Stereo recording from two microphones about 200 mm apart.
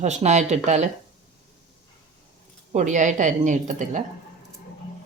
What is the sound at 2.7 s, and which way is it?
Speech, 35° right (ahead or behind).